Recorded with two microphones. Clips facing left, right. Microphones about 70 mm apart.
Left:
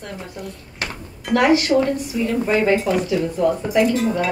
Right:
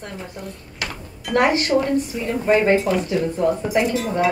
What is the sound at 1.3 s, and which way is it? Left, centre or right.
A woman's voice, right.